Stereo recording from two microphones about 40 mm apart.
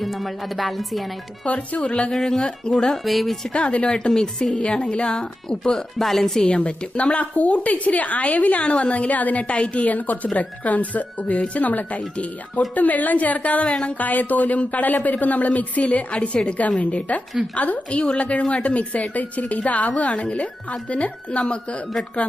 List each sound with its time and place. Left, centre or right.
0.0 s speech: centre
1.5 s a woman's voice: left
2.1 s speech: centre
2.9 s speech: centre
3.5 s a woman's voice: left
3.9 s a woman's voice: centre
6.0 s speech: centre
6.4 s a woman's voice: left